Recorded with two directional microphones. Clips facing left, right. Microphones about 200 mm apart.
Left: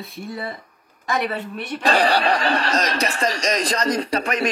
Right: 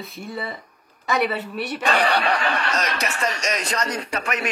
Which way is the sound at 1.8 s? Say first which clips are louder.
Left 3 dB; 35° left (ahead or behind).